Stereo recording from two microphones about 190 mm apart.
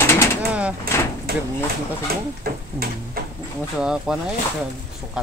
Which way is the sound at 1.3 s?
55° right (ahead or behind).